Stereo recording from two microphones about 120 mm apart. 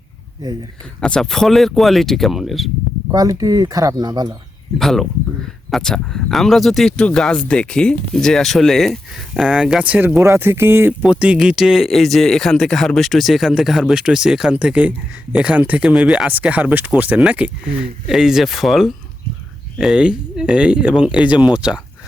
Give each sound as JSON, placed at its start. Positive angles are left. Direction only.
{"t": 1.0, "sound": "speech", "side_deg": 5}
{"t": 3.1, "sound": "speech", "side_deg": -30}
{"t": 4.8, "sound": "speech", "side_deg": 0}
{"t": 11.0, "sound": "speech", "side_deg": -10}